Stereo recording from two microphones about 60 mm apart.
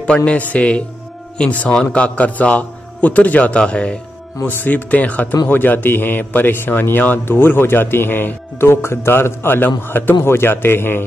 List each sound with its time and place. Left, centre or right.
0.0 s a man's voice: centre
4.6 s a man's voice: left